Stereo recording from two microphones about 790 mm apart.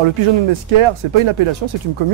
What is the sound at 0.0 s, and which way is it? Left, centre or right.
Speech, right.